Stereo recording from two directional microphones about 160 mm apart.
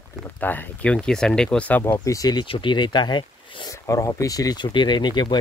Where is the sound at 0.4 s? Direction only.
10° left (ahead or behind).